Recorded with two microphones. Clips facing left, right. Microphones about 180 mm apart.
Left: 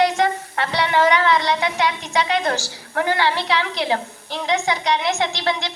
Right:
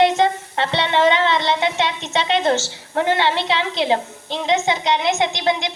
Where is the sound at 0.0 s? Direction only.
25° right (ahead or behind).